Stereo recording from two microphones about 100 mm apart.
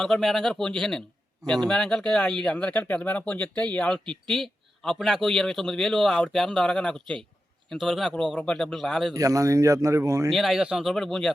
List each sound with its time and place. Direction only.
0.0 s speech: centre (ahead or behind)
9.1 s speech: 35° right (ahead or behind)
10.2 s speech: centre (ahead or behind)
10.9 s speech: 5° left (ahead or behind)